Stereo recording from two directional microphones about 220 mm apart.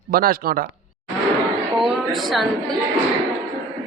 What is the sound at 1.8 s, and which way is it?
Speech, centre (ahead or behind).